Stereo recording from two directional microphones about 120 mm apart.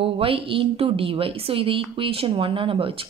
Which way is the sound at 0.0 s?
50° right (ahead or behind).